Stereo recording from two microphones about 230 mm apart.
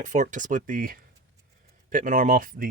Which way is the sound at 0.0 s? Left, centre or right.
Right.